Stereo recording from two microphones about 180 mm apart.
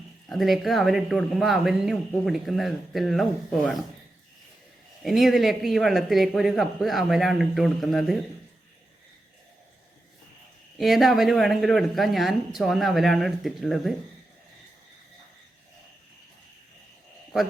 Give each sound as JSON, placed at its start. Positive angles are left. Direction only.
{"t": 0.3, "sound": "speech", "side_deg": 0}
{"t": 5.0, "sound": "speech", "side_deg": 0}
{"t": 10.8, "sound": "speech", "side_deg": 0}